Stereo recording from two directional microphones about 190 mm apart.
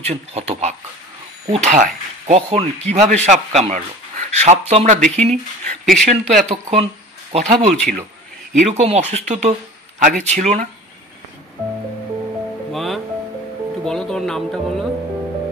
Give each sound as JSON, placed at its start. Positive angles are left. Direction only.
{"t": 0.0, "sound": "speech", "side_deg": -35}
{"t": 12.7, "sound": "music", "side_deg": 0}
{"t": 13.8, "sound": "speech", "side_deg": 5}